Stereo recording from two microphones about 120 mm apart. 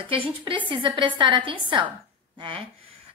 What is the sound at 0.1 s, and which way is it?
A woman's voice, 45° right (ahead or behind).